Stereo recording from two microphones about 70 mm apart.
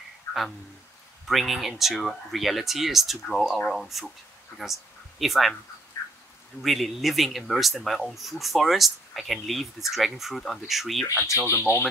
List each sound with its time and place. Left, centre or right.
1.2 s speech: centre
5.2 s speech: centre
6.0 s a sound: left
6.6 s speech: centre
11.4 s speech: left